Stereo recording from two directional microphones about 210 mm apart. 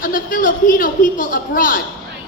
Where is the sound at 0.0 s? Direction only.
40° left (ahead or behind).